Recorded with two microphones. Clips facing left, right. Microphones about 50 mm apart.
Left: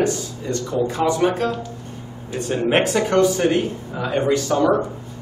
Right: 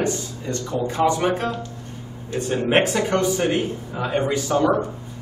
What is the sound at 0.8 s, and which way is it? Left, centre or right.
Speech, right.